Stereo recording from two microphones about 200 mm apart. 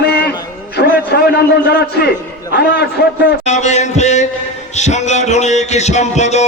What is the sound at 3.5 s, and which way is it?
A man's voice, 35° left (ahead or behind).